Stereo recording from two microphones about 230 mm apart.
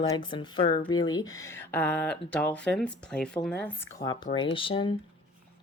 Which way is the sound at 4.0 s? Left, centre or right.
Left.